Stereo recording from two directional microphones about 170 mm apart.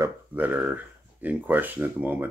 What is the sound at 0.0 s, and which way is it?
Speech, 10° right (ahead or behind).